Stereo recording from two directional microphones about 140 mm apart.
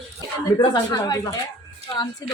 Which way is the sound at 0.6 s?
30° left (ahead or behind).